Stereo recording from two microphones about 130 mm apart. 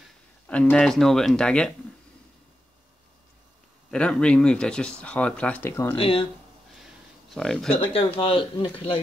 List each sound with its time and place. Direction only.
0.5 s speech: 10° left (ahead or behind)
3.9 s speech: 5° left (ahead or behind)
5.9 s speech: 45° left (ahead or behind)
7.2 s speech: 5° left (ahead or behind)
7.9 s speech: 45° left (ahead or behind)